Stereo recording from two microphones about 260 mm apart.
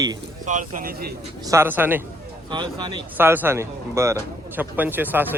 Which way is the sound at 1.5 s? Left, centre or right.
Centre.